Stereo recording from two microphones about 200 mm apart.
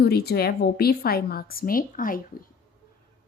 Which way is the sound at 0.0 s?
50° left (ahead or behind).